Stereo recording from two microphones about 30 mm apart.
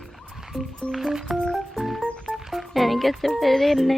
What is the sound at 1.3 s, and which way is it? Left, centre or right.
Music, centre.